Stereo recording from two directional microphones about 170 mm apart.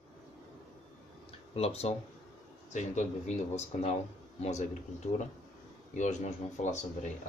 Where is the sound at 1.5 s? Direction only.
35° left (ahead or behind).